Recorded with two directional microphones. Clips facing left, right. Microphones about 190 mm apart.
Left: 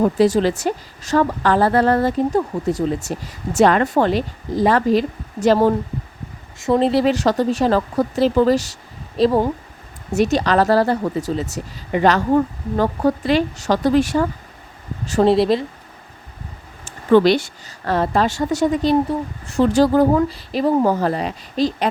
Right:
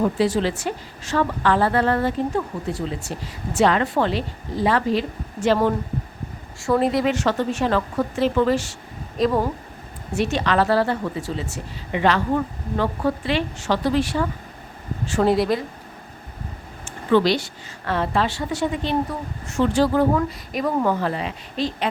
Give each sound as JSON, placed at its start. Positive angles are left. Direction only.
{"t": 0.0, "sound": "a woman's voice", "side_deg": 40}
{"t": 6.6, "sound": "a woman's voice", "side_deg": 25}
{"t": 10.1, "sound": "a woman's voice", "side_deg": 40}
{"t": 15.2, "sound": "speech", "side_deg": 25}
{"t": 16.8, "sound": "a woman's voice", "side_deg": 45}
{"t": 20.1, "sound": "a woman's voice", "side_deg": 30}